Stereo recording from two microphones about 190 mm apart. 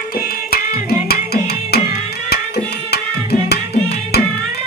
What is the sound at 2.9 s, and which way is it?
Tabla, 60° left (ahead or behind).